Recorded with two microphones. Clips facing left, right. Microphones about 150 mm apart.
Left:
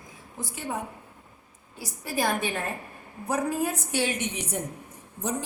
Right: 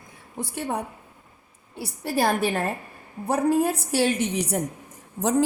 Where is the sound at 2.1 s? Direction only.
35° right (ahead or behind).